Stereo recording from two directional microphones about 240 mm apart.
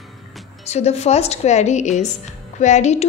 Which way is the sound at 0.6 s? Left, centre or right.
Left.